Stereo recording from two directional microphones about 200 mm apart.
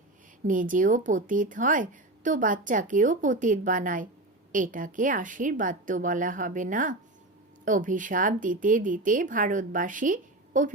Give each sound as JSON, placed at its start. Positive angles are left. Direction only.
{"t": 0.4, "sound": "speech", "side_deg": -40}